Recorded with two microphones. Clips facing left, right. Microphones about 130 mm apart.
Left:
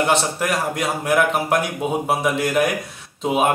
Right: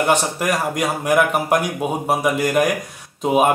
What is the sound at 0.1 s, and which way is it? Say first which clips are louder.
Speech: right 1 dB; 15° right (ahead or behind).